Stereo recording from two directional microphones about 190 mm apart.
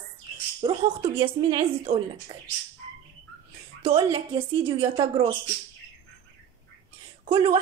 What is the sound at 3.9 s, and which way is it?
A woman's voice, 30° right (ahead or behind).